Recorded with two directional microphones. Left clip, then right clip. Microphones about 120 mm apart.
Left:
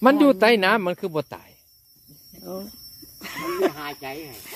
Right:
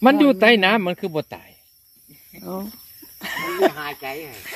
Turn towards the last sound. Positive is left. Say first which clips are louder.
# right 4 dB
turn(degrees=-90)